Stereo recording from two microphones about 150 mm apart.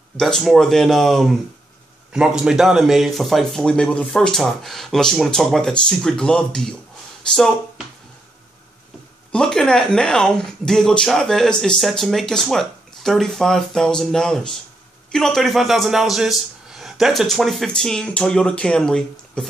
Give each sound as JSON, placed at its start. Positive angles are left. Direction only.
{"t": 0.2, "sound": "speech", "side_deg": 0}
{"t": 9.3, "sound": "speech", "side_deg": 5}